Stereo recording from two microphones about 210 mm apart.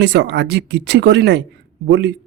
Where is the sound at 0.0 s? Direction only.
55° right (ahead or behind).